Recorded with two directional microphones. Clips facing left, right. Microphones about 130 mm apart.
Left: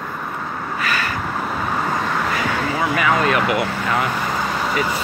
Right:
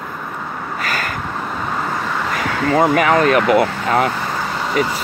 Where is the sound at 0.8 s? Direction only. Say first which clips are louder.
Even; 45° right (ahead or behind).